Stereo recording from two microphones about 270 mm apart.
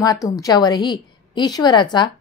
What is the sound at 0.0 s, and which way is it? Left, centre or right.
A woman's voice, centre.